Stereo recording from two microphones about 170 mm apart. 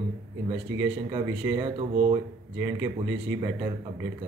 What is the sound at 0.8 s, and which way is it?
Speech, 25° right (ahead or behind).